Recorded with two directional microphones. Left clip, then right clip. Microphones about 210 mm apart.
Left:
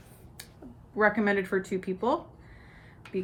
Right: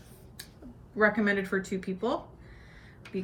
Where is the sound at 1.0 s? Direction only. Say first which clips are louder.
Left 1 dB; 45° left (ahead or behind).